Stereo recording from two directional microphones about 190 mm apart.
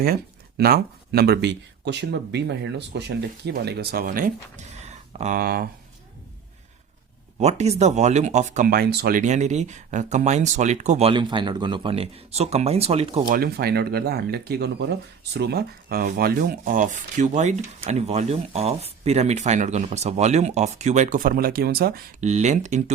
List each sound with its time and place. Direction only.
0.0 s speech: 50° right (ahead or behind)
7.3 s speech: 35° right (ahead or behind)
13.3 s speech: 55° right (ahead or behind)
22.2 s speech: 35° right (ahead or behind)